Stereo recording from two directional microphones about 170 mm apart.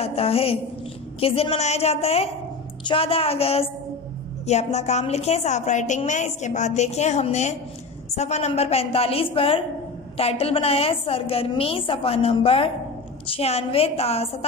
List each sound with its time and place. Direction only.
0.0 s a woman's voice: 35° left (ahead or behind)